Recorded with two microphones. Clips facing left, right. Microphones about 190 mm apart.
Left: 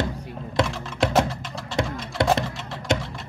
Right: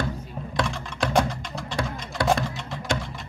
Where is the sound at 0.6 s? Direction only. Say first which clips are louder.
Left 4 dB; 25° left (ahead or behind).